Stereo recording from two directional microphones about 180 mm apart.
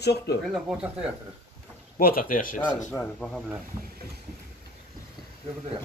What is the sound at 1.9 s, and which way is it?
Speech, 50° left (ahead or behind).